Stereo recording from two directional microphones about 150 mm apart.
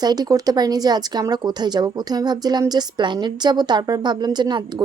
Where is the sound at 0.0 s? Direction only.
25° right (ahead or behind).